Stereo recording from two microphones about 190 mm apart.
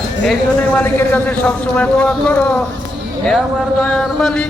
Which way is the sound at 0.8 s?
10° left (ahead or behind).